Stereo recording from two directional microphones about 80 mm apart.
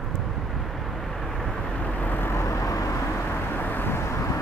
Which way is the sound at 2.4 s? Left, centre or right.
Left.